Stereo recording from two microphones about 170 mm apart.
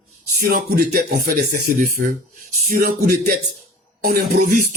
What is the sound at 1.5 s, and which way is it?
Speech, 50° right (ahead or behind).